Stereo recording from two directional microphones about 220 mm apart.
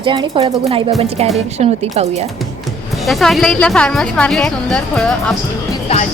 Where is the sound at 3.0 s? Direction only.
Centre (ahead or behind).